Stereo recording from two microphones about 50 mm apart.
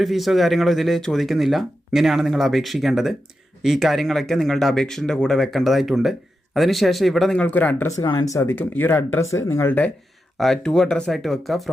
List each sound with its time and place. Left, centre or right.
0.0 s speech: centre
5.4 s speech: centre
7.4 s speech: left
7.9 s speech: left
8.4 s speech: left
9.3 s speech: left
10.3 s speech: centre
11.1 s speech: centre